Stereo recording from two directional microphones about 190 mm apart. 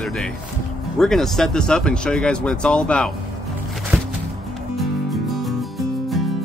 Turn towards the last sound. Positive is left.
turn(degrees=0)  # may be behind; listen again after turning